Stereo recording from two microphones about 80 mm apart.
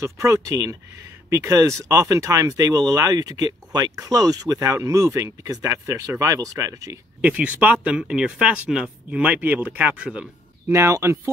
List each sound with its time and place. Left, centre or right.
0.0 s speech: right
4.6 s speech: right
7.2 s speech: centre
10.7 s speech: right